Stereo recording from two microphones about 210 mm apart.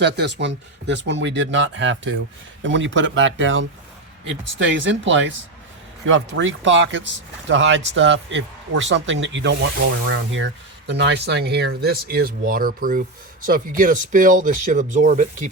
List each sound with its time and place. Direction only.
0.0 s speech: 55° right (ahead or behind); by 15.4 s 35° right (ahead or behind)